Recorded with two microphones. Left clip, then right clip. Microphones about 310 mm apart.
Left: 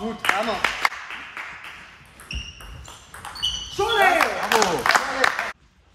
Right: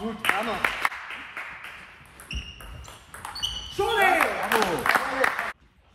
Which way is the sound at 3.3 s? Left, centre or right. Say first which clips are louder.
Left 4 dB; centre.